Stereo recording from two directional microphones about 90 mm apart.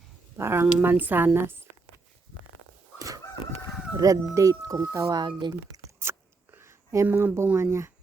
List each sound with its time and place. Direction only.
0.3 s speech: 25° right (ahead or behind)
3.9 s speech: 40° right (ahead or behind)
5.1 s speech: 55° right (ahead or behind)
6.0 s a sound: 25° right (ahead or behind)